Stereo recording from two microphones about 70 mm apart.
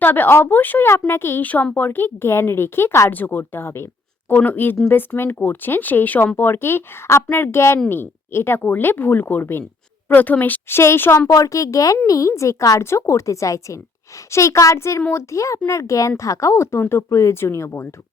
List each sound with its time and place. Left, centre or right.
0.0 s a woman's voice: left
3.1 s a woman's voice: left
10.8 s speech: left
11.3 s speech: left